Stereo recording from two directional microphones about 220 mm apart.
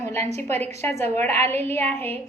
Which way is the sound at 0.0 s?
10° left (ahead or behind).